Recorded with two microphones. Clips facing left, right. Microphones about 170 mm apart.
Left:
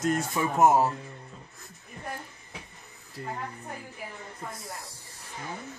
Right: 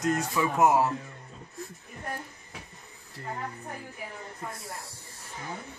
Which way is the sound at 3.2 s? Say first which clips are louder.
Left 2 dB; 15° left (ahead or behind).